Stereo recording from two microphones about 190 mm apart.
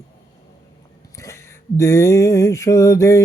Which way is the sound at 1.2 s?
15° left (ahead or behind).